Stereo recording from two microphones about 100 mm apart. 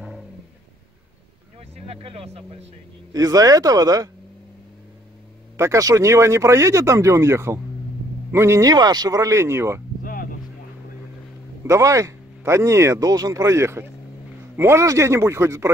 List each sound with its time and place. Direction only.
1.9 s vehicle: 85° right
3.1 s speech: 40° right (ahead or behind)
5.6 s speech: 30° right (ahead or behind)
11.6 s speech: 30° right (ahead or behind)